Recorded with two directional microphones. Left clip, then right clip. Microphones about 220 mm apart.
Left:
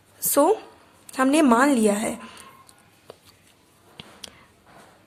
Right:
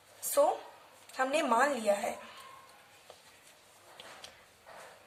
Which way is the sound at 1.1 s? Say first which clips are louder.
Left 10 dB; 50° left (ahead or behind).